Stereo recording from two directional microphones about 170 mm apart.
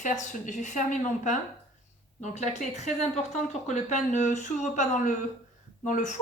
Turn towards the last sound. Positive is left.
turn(degrees=50)  # may be behind; listen again after turning